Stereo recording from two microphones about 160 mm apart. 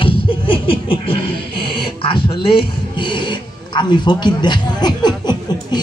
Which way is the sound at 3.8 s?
25° left (ahead or behind).